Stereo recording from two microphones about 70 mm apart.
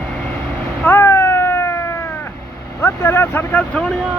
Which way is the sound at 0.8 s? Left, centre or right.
Left.